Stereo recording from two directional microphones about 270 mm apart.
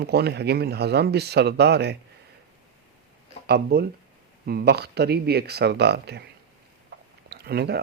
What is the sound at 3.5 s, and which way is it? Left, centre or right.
Speech, right.